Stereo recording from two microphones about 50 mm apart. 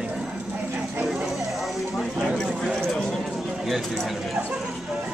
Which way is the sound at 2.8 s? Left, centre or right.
Centre.